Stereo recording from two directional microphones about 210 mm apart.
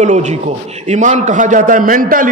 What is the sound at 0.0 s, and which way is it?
A man's voice, 35° right (ahead or behind).